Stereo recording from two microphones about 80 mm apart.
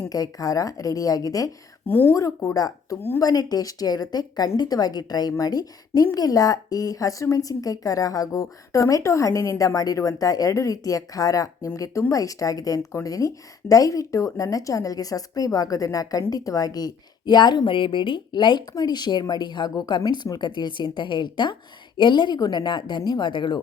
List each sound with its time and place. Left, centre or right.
0.1 s a woman's voice: left
1.9 s speech: left
2.5 s a woman's voice: left
18.7 s a woman's voice: left